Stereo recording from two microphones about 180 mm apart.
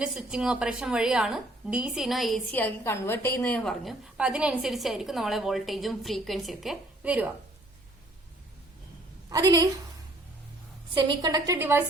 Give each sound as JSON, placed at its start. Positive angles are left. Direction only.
{"t": 0.0, "sound": "a woman's voice", "side_deg": -5}
{"t": 9.3, "sound": "a woman's voice", "side_deg": -20}
{"t": 10.9, "sound": "a woman's voice", "side_deg": -20}